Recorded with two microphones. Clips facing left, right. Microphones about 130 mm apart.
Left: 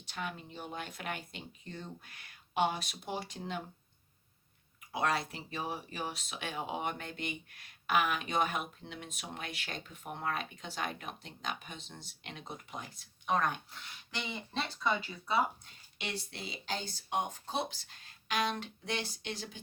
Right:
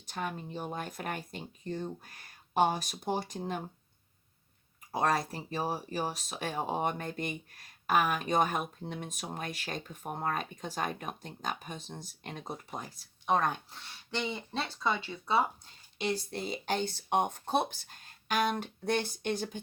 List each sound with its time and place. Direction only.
0.0 s speech: 40° right (ahead or behind)
4.9 s speech: 40° right (ahead or behind)